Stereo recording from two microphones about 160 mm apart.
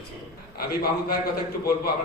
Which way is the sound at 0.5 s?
70° left (ahead or behind).